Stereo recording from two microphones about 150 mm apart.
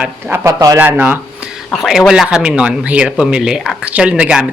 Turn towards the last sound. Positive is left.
turn(degrees=-5)  # may be behind; listen again after turning